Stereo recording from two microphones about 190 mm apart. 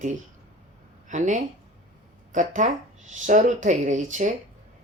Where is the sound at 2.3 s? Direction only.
40° right (ahead or behind).